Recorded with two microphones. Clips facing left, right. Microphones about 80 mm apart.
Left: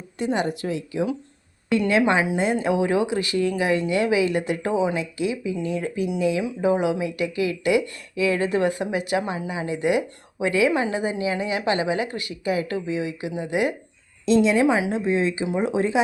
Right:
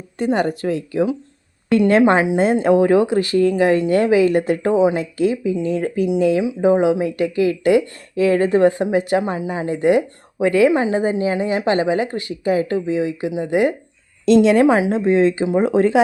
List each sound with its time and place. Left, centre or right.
0.2 s speech: right
6.6 s speech: right
14.3 s speech: right
14.9 s speech: right